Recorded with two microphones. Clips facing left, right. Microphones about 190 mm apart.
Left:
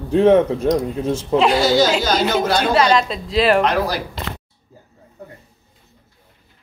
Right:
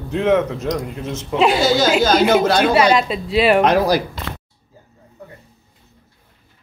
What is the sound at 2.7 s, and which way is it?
Speech, 10° right (ahead or behind).